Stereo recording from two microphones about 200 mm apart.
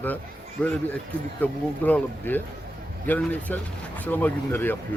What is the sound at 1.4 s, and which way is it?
A man's voice, 10° left (ahead or behind).